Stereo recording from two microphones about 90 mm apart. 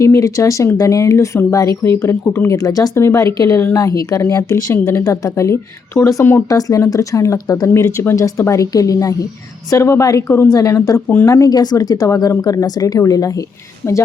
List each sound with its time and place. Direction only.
0.0 s speech: 35° left (ahead or behind)
2.6 s speech: 40° left (ahead or behind)
2.9 s speech: 30° left (ahead or behind)
10.2 s speech: 25° left (ahead or behind)
10.5 s speech: 40° left (ahead or behind)